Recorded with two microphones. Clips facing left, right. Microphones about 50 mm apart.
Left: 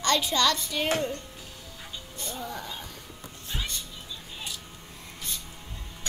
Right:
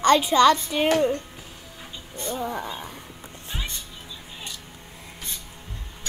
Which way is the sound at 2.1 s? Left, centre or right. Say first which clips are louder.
Right 8 dB; right.